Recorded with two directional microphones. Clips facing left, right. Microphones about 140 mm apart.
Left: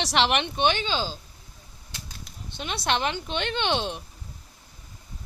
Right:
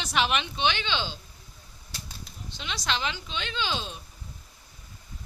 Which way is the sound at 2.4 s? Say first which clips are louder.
Left 5 dB; 55° left (ahead or behind).